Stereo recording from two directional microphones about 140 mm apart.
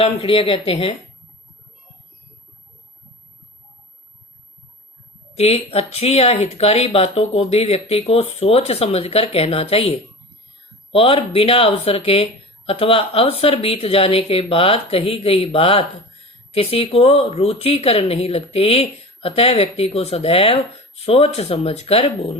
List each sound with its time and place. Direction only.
0.0 s speech: 40° left (ahead or behind)
5.4 s speech: 50° left (ahead or behind)